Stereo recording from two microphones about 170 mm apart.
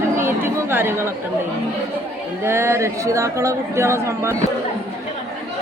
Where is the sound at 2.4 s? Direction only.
15° right (ahead or behind).